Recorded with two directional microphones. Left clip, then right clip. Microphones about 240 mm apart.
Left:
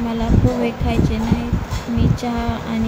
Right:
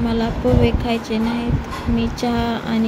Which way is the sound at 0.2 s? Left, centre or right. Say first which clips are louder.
Right 2 dB; centre.